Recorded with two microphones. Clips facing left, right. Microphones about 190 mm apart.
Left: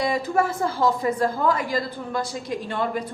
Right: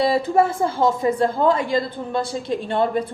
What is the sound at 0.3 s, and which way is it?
A woman's voice, 25° right (ahead or behind).